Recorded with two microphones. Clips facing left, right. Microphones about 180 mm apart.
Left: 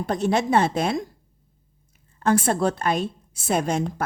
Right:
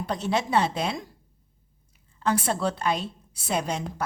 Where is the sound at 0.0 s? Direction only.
50° left (ahead or behind).